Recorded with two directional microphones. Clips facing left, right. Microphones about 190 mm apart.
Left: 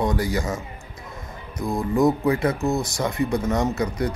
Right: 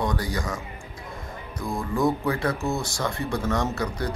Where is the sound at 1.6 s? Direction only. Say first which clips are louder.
Left 5 dB; 20° left (ahead or behind).